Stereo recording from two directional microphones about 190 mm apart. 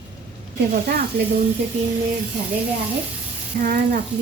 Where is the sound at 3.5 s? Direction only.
40° right (ahead or behind).